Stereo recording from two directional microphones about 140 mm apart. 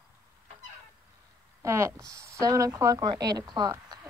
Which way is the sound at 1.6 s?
20° right (ahead or behind).